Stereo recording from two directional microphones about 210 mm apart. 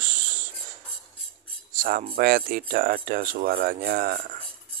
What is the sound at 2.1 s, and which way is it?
Speech, 45° right (ahead or behind).